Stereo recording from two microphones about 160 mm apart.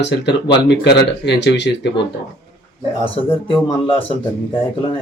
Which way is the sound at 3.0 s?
35° left (ahead or behind).